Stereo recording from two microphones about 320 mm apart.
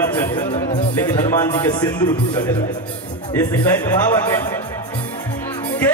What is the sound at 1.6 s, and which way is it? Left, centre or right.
Speech, centre.